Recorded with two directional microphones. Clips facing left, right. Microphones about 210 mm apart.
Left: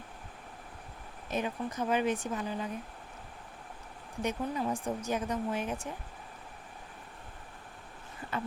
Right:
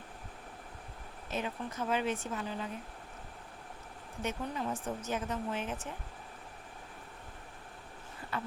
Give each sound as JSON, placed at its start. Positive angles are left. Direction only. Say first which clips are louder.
{"t": 1.3, "sound": "speech", "louder": "left 4 dB", "side_deg": 15}
{"t": 4.2, "sound": "speech", "louder": "left 4 dB", "side_deg": 15}
{"t": 8.3, "sound": "a sound", "louder": "left 3 dB", "side_deg": 20}